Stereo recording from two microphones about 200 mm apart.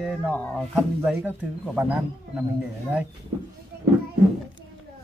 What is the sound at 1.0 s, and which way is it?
Speech, 5° right (ahead or behind).